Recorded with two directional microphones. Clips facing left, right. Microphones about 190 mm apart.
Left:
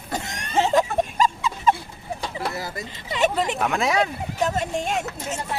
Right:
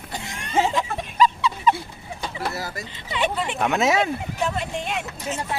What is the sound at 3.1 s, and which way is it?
Speech, 40° left (ahead or behind).